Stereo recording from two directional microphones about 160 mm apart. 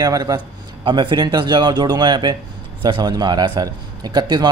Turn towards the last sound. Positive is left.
turn(degrees=-25)  # may be behind; listen again after turning